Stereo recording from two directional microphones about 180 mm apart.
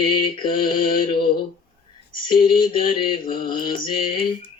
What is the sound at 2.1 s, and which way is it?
Mantra, 25° left (ahead or behind).